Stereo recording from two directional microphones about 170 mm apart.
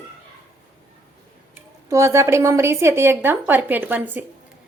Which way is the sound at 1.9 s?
15° right (ahead or behind).